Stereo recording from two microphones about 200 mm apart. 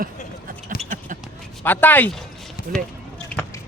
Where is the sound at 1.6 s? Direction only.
10° left (ahead or behind).